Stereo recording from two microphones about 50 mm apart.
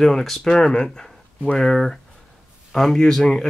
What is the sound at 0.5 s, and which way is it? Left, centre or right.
Speech, centre.